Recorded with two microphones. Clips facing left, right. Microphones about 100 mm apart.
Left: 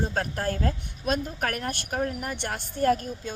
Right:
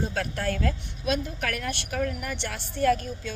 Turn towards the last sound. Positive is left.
turn(degrees=40)  # may be behind; listen again after turning